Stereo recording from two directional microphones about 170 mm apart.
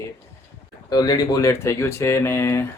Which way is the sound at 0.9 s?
25° left (ahead or behind).